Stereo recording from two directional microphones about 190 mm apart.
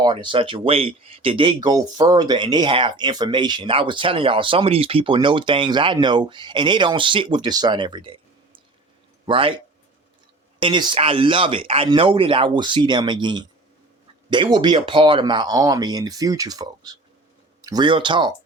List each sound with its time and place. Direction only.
0.0 s speech: 25° right (ahead or behind)
10.6 s speech: 25° right (ahead or behind)